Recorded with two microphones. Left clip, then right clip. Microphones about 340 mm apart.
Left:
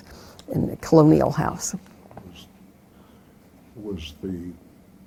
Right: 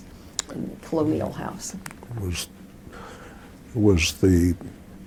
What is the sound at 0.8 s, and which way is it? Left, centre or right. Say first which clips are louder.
Speech: left 9 dB; left.